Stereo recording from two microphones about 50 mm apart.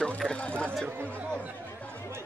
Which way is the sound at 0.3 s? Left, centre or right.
Left.